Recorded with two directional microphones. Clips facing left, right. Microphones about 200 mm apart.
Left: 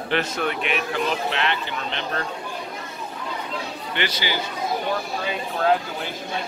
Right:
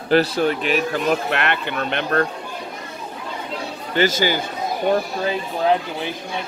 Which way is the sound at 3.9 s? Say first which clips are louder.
Right 9 dB; 45° right (ahead or behind).